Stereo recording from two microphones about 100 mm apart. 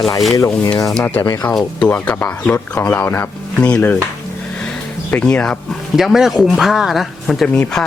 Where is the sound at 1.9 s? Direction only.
15° left (ahead or behind).